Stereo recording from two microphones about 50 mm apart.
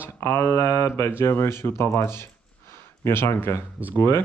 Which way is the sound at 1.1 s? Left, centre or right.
Left.